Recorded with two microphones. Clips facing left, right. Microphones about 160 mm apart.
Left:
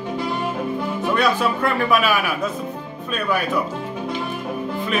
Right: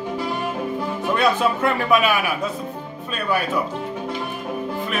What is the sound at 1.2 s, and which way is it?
Speech, 20° right (ahead or behind).